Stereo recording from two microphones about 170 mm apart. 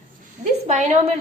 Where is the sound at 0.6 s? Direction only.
35° right (ahead or behind).